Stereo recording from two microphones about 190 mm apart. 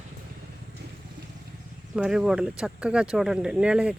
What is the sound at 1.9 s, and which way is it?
Speech, 5° right (ahead or behind).